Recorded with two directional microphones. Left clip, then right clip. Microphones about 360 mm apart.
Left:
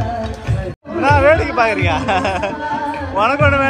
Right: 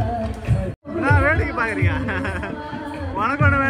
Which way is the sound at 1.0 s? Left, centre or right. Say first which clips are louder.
Left 7 dB; centre.